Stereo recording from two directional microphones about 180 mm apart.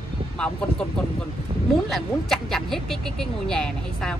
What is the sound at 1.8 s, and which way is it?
Speech, centre (ahead or behind).